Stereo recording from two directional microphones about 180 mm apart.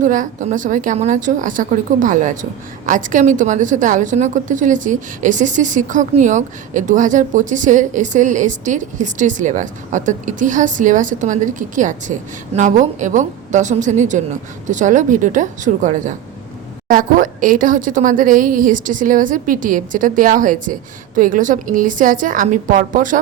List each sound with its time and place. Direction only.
0.0 s a woman's voice: 45° right (ahead or behind)